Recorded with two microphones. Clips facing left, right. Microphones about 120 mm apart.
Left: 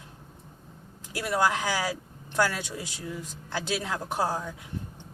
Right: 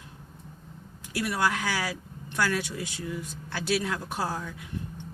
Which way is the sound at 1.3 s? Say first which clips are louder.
Left 3 dB; 20° left (ahead or behind).